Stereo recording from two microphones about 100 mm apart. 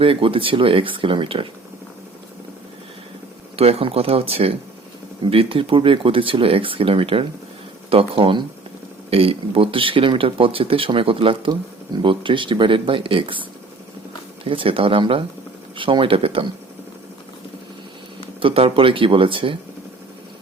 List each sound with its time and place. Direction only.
0.0 s speech: 65° right (ahead or behind)
3.5 s speech: 85° right
5.2 s speech: 65° right (ahead or behind)
9.0 s speech: 70° right (ahead or behind)
14.4 s speech: 65° right (ahead or behind)
18.3 s speech: 65° right (ahead or behind)